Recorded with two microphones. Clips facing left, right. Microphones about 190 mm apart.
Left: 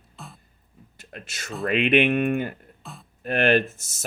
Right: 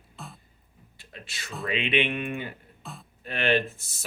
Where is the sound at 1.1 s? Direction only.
50° left (ahead or behind).